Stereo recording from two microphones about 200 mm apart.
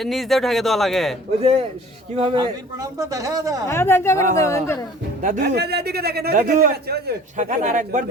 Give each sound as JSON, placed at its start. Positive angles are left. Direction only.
{"t": 0.0, "sound": "speech", "side_deg": 0}
{"t": 1.4, "sound": "a man's voice", "side_deg": -30}
{"t": 3.7, "sound": "a woman's voice", "side_deg": 10}
{"t": 5.2, "sound": "speech", "side_deg": -35}
{"t": 5.5, "sound": "a man's voice", "side_deg": -55}
{"t": 7.3, "sound": "speech", "side_deg": -40}